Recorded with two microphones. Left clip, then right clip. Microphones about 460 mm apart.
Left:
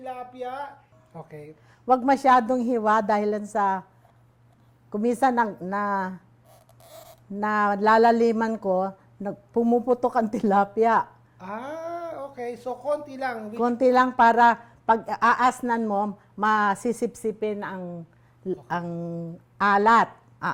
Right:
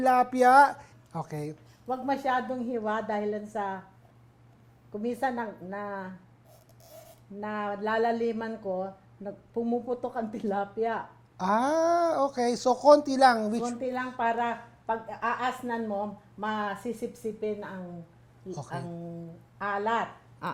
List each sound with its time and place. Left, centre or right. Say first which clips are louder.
0.0 s speech: right 13 dB; right
1.1 s speech: right 5 dB; right
1.9 s speech: left 10 dB; left
4.9 s speech: left 8 dB; left
7.3 s speech: left 10 dB; left
11.3 s speech: right 9 dB; right
13.7 s a woman's voice: left 13 dB; left
18.7 s a woman's voice: left 9 dB; left
19.5 s speech: left 11 dB; left
20.4 s a sound: left 7 dB; centre